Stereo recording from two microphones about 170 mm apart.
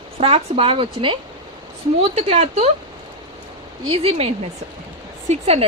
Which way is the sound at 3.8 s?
35° right (ahead or behind).